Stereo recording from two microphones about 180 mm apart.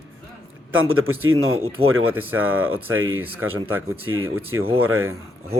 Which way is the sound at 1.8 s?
35° right (ahead or behind).